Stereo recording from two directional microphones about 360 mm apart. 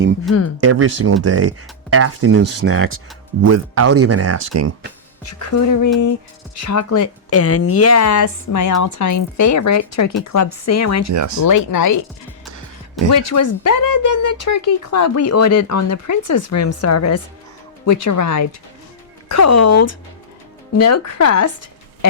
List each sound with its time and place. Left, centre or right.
0.6 s speech: right
5.2 s speech: left
11.1 s speech: right
11.4 s speech: left
13.2 s speech: left